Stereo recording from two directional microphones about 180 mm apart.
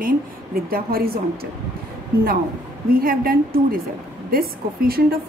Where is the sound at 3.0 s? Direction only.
55° right (ahead or behind).